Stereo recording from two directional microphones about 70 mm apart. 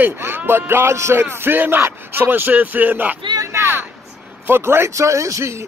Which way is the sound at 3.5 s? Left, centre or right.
Right.